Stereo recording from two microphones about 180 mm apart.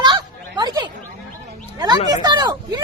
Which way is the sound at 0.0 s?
25° right (ahead or behind).